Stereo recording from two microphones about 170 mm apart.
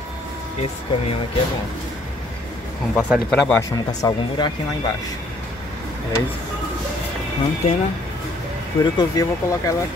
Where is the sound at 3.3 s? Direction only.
15° left (ahead or behind).